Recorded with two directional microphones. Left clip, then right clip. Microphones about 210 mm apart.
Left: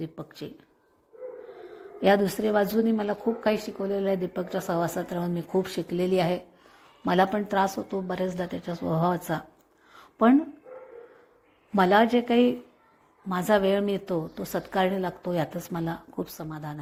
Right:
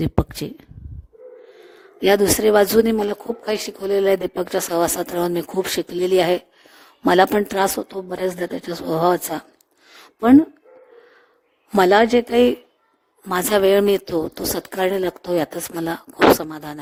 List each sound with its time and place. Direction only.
0.0 s speech: 50° right (ahead or behind)
9.9 s a sound: 40° right (ahead or behind)
11.7 s a woman's voice: 40° right (ahead or behind)